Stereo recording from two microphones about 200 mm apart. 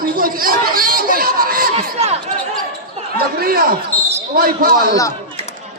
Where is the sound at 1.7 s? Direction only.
35° right (ahead or behind).